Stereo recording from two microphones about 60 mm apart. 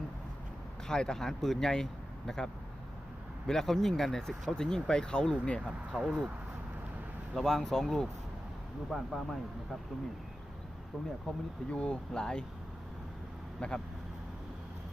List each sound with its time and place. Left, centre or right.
0.9 s speech: centre
5.9 s speech: centre
7.3 s speech: centre
11.3 s speech: centre
13.6 s speech: centre